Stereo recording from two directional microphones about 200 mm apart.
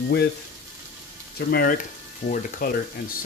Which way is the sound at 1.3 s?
50° left (ahead or behind).